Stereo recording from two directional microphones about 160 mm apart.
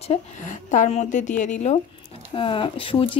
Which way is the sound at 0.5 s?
50° left (ahead or behind).